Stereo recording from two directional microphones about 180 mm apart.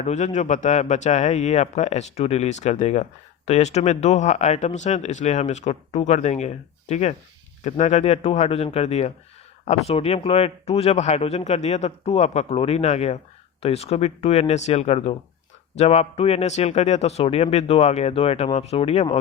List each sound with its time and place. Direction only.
0.0 s speech: 40° left (ahead or behind)